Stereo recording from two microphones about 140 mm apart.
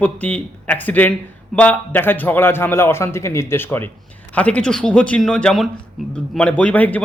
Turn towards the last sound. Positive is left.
turn(degrees=10)  # may be behind; listen again after turning